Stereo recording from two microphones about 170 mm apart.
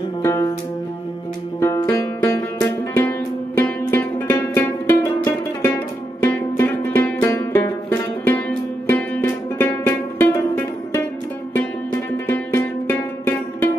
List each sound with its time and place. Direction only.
0.2 s music: 15° left (ahead or behind)
1.6 s music: 15° left (ahead or behind)
12.3 s music: 10° left (ahead or behind)